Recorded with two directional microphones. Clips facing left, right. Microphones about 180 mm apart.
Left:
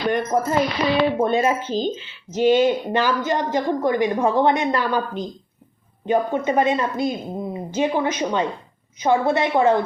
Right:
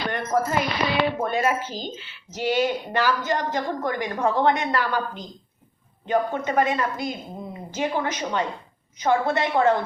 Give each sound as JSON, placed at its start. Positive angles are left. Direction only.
{"t": 0.1, "sound": "a woman's voice", "side_deg": 15}